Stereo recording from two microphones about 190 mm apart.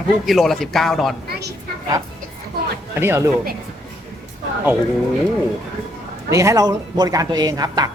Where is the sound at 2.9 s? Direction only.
10° right (ahead or behind).